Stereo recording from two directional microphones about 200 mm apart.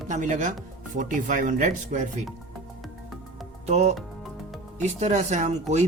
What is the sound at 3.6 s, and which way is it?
Speech, 35° right (ahead or behind).